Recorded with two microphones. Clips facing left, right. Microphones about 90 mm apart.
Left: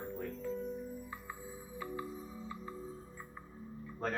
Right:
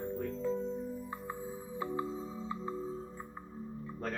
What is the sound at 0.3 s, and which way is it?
Music, 30° right (ahead or behind).